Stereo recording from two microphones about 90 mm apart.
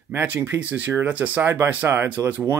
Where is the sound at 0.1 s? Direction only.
25° right (ahead or behind).